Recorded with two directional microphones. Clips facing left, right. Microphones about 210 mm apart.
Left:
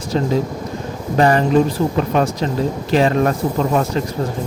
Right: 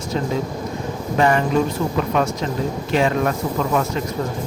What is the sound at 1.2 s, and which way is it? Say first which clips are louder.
A man's voice: left 4 dB; 35° left (ahead or behind).